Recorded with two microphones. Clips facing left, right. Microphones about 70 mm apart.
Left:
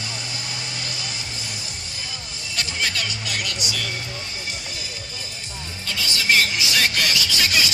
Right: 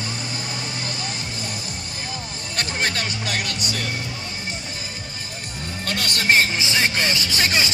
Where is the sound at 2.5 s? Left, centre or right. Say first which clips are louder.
Right 2 dB; right.